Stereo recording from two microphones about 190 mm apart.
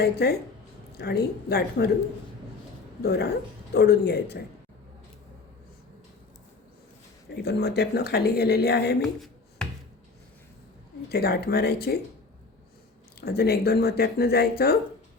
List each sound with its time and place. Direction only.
0.0 s speech: 60° left (ahead or behind)
3.0 s speech: 55° left (ahead or behind)
7.3 s speech: 60° left (ahead or behind)
9.0 s a sound: centre (ahead or behind)
11.1 s speech: 55° left (ahead or behind)
13.2 s speech: 55° left (ahead or behind)